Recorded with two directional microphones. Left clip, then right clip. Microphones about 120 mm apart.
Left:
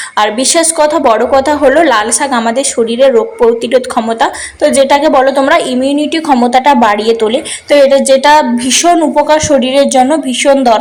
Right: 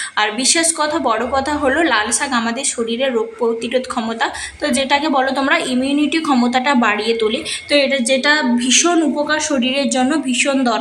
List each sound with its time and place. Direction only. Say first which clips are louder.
0.2 s a woman's voice: left 7 dB; 40° left (ahead or behind)